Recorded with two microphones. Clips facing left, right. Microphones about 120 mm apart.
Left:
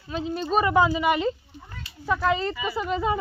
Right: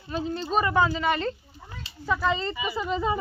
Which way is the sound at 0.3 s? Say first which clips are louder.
Left 3 dB; 5° left (ahead or behind).